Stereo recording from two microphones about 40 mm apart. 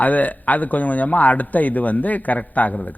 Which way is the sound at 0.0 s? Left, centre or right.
Left.